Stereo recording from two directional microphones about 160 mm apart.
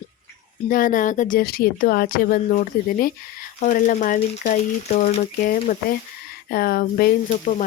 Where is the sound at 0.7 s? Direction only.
60° left (ahead or behind); by 5.5 s 40° left (ahead or behind).